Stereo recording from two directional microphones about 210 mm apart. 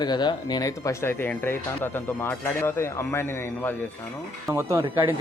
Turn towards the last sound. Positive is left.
turn(degrees=-15)  # may be behind; listen again after turning